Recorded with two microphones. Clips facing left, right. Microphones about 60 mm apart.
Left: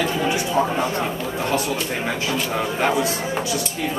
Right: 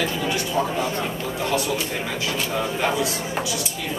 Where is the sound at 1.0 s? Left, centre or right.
Left.